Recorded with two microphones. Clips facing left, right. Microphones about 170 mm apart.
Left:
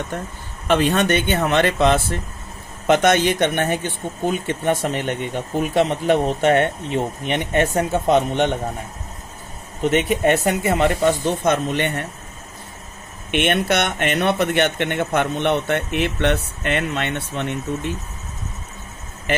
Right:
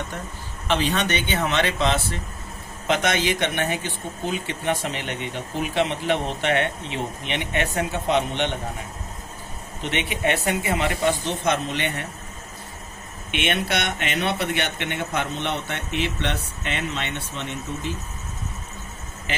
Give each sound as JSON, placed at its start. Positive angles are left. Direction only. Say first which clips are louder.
{"t": 0.7, "sound": "speech", "louder": "left 6 dB", "side_deg": 50}
{"t": 9.8, "sound": "speech", "louder": "left 8 dB", "side_deg": 45}
{"t": 13.3, "sound": "speech", "louder": "left 6 dB", "side_deg": 50}
{"t": 19.3, "sound": "speech", "louder": "left 9 dB", "side_deg": 55}